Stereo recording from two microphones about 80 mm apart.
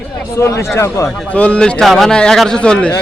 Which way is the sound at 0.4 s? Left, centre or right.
Left.